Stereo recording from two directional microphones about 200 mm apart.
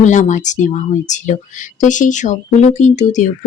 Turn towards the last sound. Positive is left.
turn(degrees=35)  # may be behind; listen again after turning